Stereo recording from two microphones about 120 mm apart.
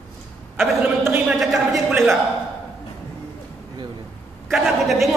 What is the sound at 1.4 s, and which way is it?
Speech, centre (ahead or behind).